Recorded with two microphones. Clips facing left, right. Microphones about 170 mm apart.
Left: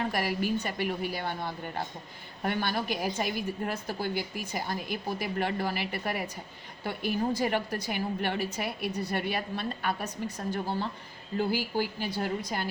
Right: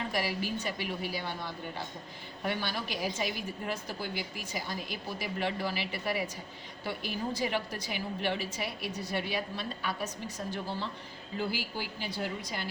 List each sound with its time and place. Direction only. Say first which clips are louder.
0.1 s a woman's voice: left 4 dB; 55° left (ahead or behind)